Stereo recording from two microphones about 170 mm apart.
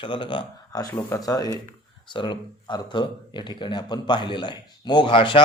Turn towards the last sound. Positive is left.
turn(degrees=30)  # may be behind; listen again after turning